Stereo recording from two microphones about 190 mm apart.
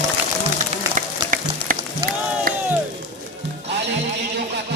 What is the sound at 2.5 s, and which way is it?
Crowd, 50° right (ahead or behind).